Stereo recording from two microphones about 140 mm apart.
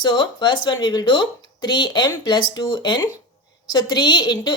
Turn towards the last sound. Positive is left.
turn(degrees=30)  # may be behind; listen again after turning